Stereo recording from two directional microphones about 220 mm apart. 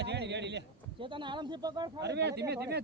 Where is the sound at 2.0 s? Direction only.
50° right (ahead or behind).